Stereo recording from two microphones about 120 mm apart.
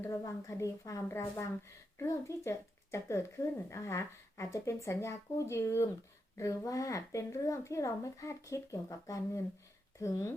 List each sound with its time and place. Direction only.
0.0 s a woman's voice: 25° left (ahead or behind)